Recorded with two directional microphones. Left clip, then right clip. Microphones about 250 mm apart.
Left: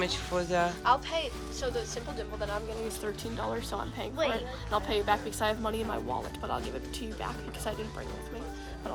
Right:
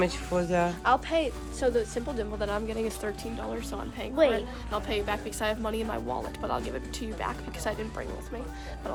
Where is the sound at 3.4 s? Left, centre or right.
Centre.